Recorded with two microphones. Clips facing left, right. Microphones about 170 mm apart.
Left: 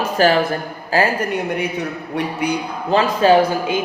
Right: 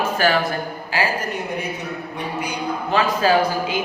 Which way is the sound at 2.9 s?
30° left (ahead or behind).